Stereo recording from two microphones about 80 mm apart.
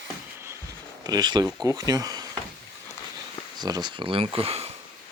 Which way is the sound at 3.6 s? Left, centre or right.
Right.